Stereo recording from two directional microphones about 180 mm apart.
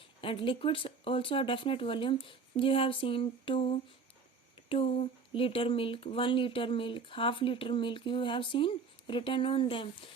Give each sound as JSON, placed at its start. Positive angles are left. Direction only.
{"t": 0.2, "sound": "speech", "side_deg": 30}